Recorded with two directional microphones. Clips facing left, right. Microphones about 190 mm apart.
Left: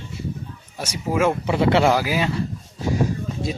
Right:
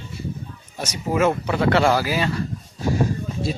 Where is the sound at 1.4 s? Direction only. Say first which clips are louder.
Left 1 dB; 20° left (ahead or behind).